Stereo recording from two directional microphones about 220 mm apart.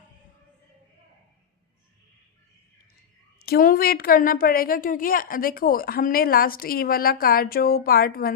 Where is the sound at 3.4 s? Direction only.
40° left (ahead or behind).